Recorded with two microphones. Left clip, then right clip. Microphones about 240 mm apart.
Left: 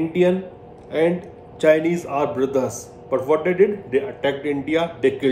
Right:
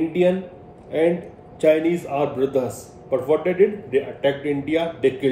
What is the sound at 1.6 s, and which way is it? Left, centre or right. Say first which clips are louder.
A man's voice: left 1 dB; centre.